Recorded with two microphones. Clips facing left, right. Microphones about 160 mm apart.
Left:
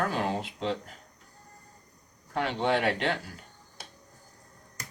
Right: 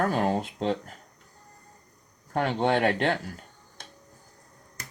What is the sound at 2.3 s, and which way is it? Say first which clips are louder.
Speech: right 3 dB; 45° right (ahead or behind).